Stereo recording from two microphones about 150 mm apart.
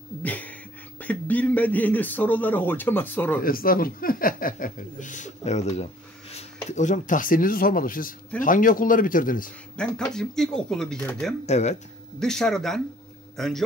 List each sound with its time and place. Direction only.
0.2 s speech: 10° left (ahead or behind)
3.4 s speech: 75° left (ahead or behind)
9.8 s speech: 5° left (ahead or behind)
11.4 s speech: 50° left (ahead or behind)
12.2 s speech: 5° left (ahead or behind)